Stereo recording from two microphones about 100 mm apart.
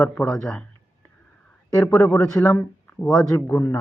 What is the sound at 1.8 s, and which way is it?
Speech, 25° left (ahead or behind).